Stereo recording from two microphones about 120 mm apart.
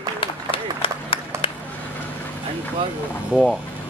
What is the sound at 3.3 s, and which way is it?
Speech, 10° right (ahead or behind).